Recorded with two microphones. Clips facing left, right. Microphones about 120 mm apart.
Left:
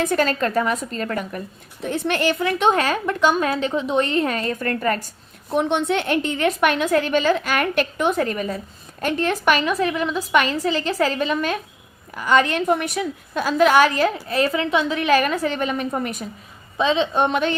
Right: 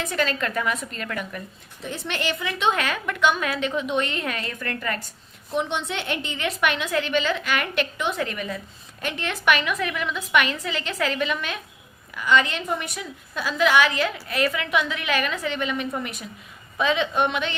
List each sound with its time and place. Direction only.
0.0 s a woman's voice: 45° left (ahead or behind)
1.8 s a woman's voice: 50° left (ahead or behind)
2.7 s a woman's voice: 35° left (ahead or behind)
5.5 s a woman's voice: 55° left (ahead or behind)
16.7 s a woman's voice: 30° left (ahead or behind)